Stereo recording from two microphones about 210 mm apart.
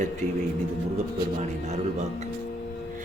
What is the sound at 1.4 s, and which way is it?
Speech, 30° right (ahead or behind).